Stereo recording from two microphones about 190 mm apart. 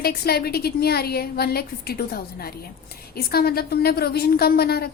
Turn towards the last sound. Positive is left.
turn(degrees=55)  # may be behind; listen again after turning